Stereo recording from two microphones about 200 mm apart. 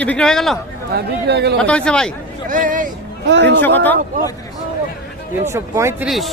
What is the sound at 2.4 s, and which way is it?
Speech, 40° right (ahead or behind).